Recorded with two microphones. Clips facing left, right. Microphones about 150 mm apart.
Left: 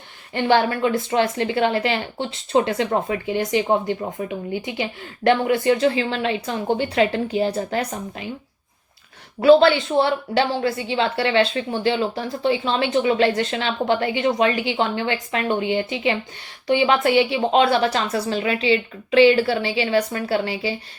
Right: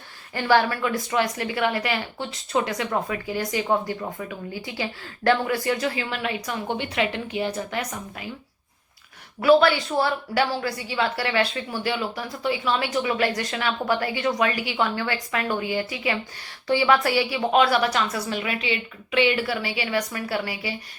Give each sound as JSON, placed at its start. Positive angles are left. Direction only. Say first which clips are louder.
{"t": 0.3, "sound": "a woman's voice", "louder": "left 2 dB", "side_deg": 20}
{"t": 9.4, "sound": "a woman's voice", "louder": "left 4 dB", "side_deg": 25}